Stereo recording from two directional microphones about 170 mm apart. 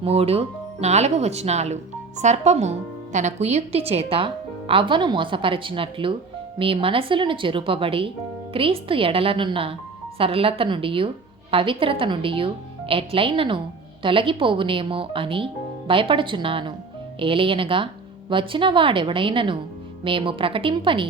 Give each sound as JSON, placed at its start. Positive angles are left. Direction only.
{"t": 0.0, "sound": "speech", "side_deg": -35}